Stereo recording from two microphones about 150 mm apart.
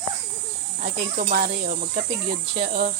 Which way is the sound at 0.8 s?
65° right (ahead or behind).